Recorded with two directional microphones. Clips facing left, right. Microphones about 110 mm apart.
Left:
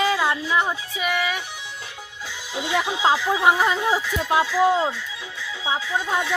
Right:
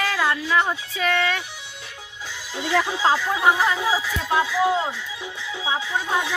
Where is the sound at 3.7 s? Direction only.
5° right (ahead or behind).